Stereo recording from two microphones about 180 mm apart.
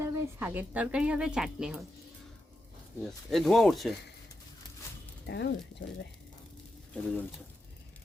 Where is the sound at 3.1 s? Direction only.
Centre (ahead or behind).